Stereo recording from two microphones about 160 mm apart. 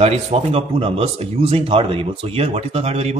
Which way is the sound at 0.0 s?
40° right (ahead or behind).